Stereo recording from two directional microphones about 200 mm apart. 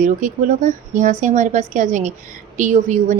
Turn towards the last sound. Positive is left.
turn(degrees=-40)  # may be behind; listen again after turning